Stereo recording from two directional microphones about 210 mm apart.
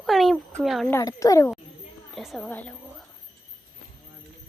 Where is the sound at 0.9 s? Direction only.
15° left (ahead or behind).